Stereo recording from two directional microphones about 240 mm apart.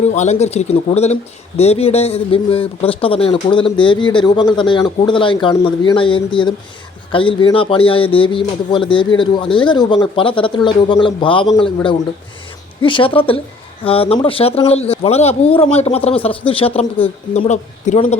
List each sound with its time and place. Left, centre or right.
0.1 s speech: left